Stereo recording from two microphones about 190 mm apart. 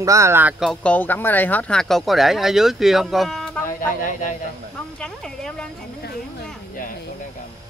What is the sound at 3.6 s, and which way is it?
Speech, 45° left (ahead or behind).